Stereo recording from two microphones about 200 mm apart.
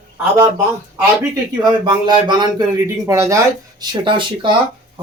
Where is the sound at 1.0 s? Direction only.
20° right (ahead or behind).